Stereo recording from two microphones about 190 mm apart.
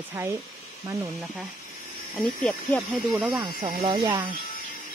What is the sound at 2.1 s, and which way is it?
Speech, 5° left (ahead or behind).